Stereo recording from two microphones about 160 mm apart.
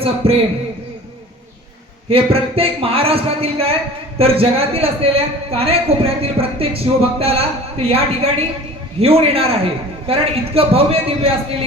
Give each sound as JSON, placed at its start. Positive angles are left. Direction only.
{"t": 0.2, "sound": "a man's voice", "side_deg": -35}
{"t": 2.0, "sound": "a man's voice", "side_deg": -35}